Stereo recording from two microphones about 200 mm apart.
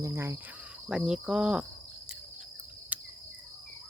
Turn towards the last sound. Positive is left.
turn(degrees=-5)  # may be behind; listen again after turning